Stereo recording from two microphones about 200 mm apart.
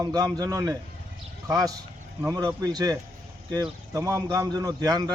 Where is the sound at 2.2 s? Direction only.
20° right (ahead or behind).